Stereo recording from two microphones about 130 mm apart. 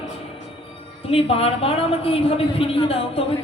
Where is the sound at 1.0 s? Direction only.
45° left (ahead or behind).